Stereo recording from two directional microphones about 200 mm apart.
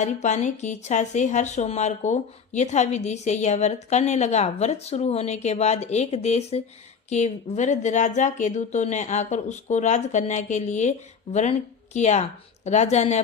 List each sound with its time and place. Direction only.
0.0 s speech: 35° left (ahead or behind)